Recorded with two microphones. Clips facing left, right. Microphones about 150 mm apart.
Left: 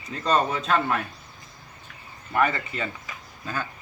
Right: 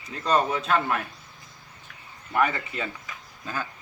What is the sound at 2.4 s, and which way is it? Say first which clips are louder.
Speech: left 1 dB; 15° right (ahead or behind).